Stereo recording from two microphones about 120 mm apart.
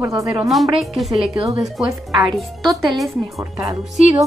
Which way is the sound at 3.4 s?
25° right (ahead or behind).